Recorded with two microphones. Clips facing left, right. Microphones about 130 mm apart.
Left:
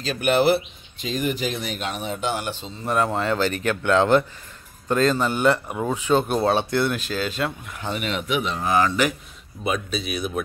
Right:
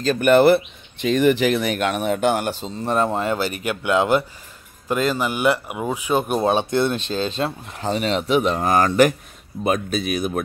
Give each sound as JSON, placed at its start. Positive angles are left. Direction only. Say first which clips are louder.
{"t": 0.0, "sound": "speech", "louder": "right 5 dB", "side_deg": -45}
{"t": 2.8, "sound": "speech", "louder": "right 2 dB", "side_deg": -30}
{"t": 3.1, "sound": "speech", "louder": "even", "side_deg": -15}